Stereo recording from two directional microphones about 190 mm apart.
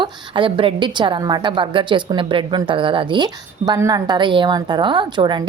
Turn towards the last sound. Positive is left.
turn(degrees=-25)  # may be behind; listen again after turning